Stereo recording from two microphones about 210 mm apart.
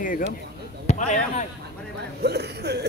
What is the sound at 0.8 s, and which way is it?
Basketball bounce, 35° left (ahead or behind).